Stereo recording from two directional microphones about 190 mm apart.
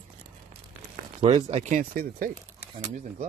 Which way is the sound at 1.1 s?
35° right (ahead or behind).